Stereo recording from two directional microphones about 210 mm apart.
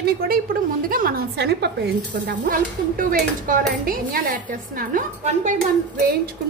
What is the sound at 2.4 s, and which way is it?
Speech, 40° right (ahead or behind).